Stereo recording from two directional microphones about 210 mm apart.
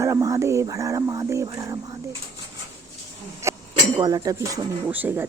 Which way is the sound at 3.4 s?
15° right (ahead or behind).